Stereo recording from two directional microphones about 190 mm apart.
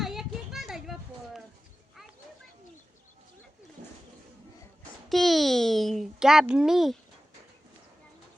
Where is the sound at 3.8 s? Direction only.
40° right (ahead or behind).